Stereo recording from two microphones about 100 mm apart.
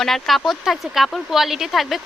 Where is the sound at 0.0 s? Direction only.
Centre (ahead or behind).